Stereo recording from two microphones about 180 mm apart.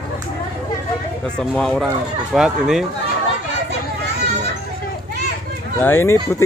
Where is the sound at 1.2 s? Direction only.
5° left (ahead or behind).